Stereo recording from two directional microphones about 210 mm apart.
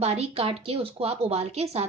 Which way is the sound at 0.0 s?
30° right (ahead or behind).